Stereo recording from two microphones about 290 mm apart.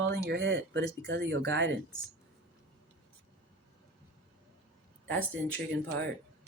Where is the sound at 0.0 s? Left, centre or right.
Right.